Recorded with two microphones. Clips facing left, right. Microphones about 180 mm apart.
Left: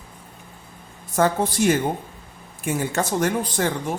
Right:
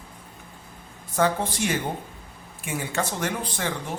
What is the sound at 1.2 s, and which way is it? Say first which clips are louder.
Speech: left 4 dB; 45° left (ahead or behind).